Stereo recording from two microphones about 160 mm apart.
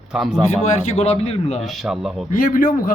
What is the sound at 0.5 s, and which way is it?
A man's voice, 40° left (ahead or behind).